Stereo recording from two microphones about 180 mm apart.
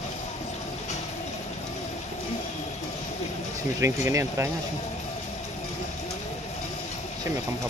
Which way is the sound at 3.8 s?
15° right (ahead or behind).